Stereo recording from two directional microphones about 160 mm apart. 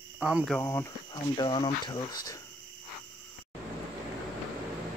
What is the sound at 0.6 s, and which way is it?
Speech, 20° left (ahead or behind).